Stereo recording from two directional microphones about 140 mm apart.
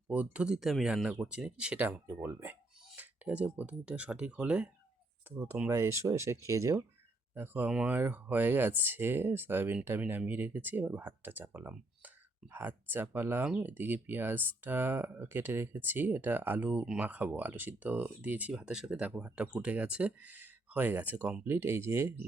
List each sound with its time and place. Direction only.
0.1 s speech: 10° right (ahead or behind)